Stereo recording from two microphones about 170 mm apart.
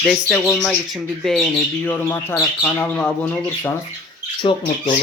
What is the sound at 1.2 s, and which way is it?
Speech, 5° left (ahead or behind).